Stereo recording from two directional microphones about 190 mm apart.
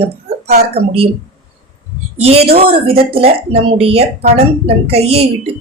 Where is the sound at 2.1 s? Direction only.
30° right (ahead or behind).